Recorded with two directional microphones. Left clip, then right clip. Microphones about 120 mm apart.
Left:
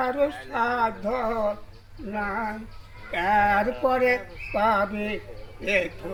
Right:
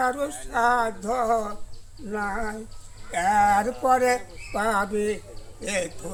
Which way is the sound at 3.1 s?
35° right (ahead or behind).